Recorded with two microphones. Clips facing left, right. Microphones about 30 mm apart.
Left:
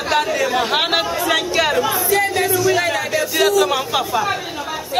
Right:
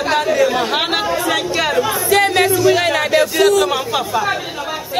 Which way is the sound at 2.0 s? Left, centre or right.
Right.